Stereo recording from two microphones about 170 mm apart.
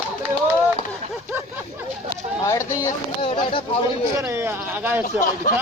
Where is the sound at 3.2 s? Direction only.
30° left (ahead or behind).